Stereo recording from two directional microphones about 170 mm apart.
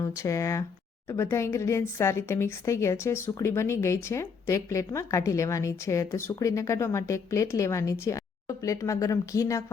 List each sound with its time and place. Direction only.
0.0 s speech: 15° left (ahead or behind)